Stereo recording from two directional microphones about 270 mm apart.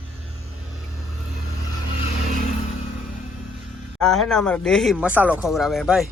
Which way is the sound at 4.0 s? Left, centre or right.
Centre.